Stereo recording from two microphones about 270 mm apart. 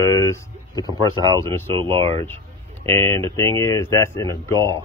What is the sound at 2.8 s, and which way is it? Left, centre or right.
Speech, centre.